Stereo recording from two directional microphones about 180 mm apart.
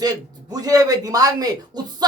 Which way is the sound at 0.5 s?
20° right (ahead or behind).